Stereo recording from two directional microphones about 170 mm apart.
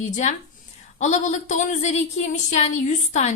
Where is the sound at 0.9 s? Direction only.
45° left (ahead or behind).